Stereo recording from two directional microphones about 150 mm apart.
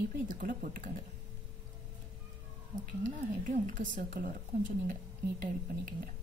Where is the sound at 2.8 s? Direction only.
65° right (ahead or behind).